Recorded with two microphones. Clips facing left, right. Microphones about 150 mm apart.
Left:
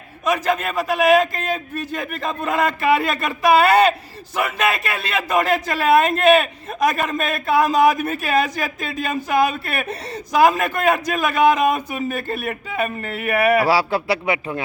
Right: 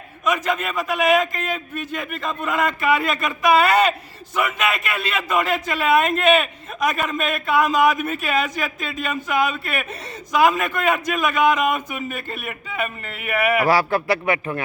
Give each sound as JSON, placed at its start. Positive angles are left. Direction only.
{"t": 0.3, "sound": "speech", "side_deg": 35}
{"t": 13.7, "sound": "a man's voice", "side_deg": 10}